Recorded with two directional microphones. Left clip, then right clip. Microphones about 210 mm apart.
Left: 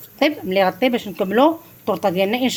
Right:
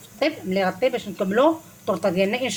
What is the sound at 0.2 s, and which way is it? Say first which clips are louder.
Speech: left 5 dB; 40° left (ahead or behind).